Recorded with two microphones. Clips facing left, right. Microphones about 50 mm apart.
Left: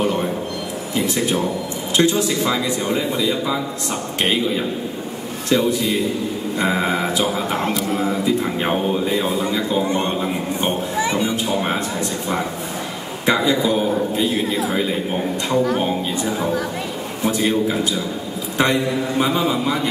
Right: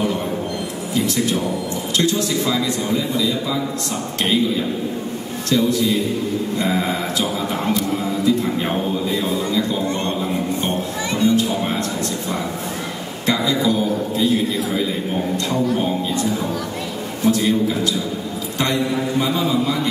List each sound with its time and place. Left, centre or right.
0.0 s a sound: left
0.9 s a man's voice: left
5.5 s a man's voice: left
7.5 s a man's voice: centre
8.1 s a man's voice: left
13.2 s a man's voice: left
16.2 s a man's voice: centre